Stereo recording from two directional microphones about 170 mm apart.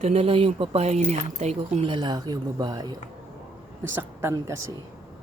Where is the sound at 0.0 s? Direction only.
35° right (ahead or behind).